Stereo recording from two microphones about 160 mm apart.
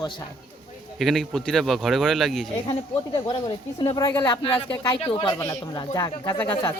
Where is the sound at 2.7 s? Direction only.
25° left (ahead or behind).